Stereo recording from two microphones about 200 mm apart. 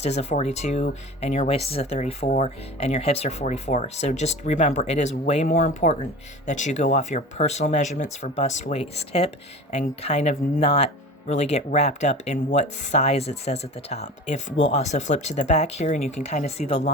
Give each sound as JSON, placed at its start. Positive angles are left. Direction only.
{"t": 0.0, "sound": "speech", "side_deg": 35}